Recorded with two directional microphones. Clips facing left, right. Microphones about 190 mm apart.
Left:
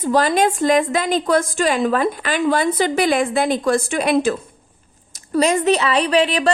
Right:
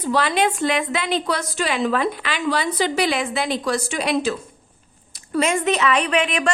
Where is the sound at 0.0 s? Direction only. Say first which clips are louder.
Left 4 dB; 45° left (ahead or behind).